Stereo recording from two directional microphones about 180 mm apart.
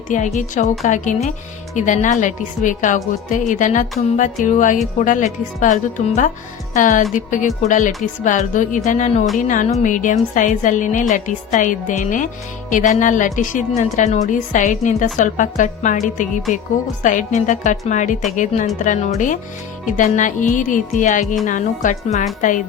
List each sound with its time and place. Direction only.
0.3 s a woman's voice: 45° left (ahead or behind)